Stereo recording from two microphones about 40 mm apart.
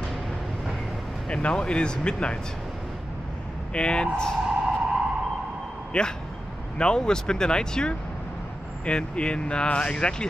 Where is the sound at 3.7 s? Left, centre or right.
Left.